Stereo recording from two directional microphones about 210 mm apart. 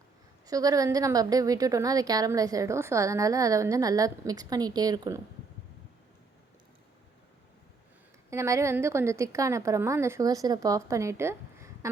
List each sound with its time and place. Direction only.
0.4 s a woman's voice: 15° right (ahead or behind)
8.3 s a woman's voice: 15° right (ahead or behind)